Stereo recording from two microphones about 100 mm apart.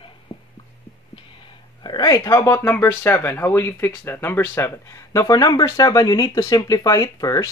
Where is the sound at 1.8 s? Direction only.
45° left (ahead or behind).